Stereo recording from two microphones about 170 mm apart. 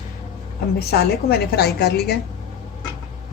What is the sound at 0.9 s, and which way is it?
Speech, 70° left (ahead or behind).